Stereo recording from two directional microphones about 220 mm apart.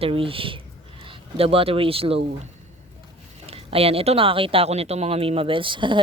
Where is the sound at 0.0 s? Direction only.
25° right (ahead or behind).